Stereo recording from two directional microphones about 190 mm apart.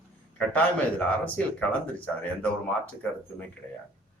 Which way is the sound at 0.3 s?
5° left (ahead or behind).